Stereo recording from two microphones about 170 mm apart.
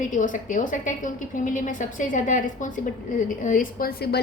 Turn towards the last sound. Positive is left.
turn(degrees=65)  # may be behind; listen again after turning